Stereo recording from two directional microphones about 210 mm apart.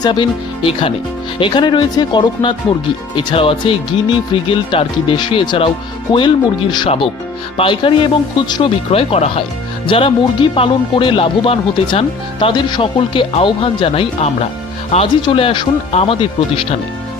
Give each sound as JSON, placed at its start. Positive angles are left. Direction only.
{"t": 0.0, "sound": "speech", "side_deg": 20}